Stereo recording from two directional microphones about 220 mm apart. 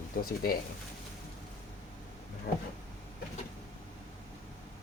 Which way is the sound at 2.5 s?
40° left (ahead or behind).